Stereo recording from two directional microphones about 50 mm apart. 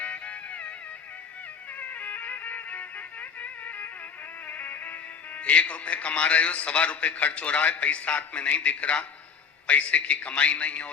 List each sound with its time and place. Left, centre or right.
0.0 s music: left
1.7 s music: left
5.4 s a man's voice: left